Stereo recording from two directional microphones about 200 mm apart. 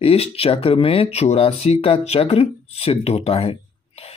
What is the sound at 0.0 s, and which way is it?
Speech, 30° left (ahead or behind).